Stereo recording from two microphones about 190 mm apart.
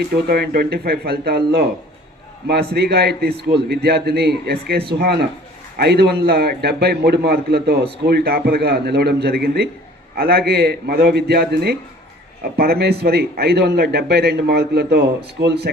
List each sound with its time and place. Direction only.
0.0 s a man's voice: 55° right (ahead or behind)